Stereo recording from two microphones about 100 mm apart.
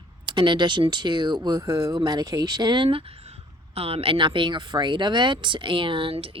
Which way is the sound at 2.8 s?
80° right.